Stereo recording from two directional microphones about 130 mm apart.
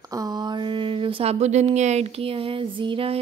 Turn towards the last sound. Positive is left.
turn(degrees=-40)  # may be behind; listen again after turning